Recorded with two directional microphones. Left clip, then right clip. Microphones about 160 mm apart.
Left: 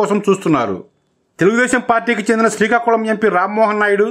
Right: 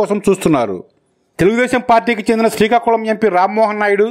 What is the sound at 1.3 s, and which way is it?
Speech, 25° right (ahead or behind).